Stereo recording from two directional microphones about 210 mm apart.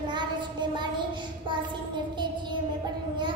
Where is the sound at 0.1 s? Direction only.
20° right (ahead or behind).